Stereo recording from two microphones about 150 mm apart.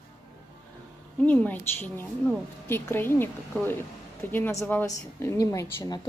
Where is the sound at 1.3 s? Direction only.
10° left (ahead or behind).